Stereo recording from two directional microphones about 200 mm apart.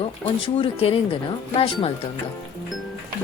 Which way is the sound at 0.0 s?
30° left (ahead or behind).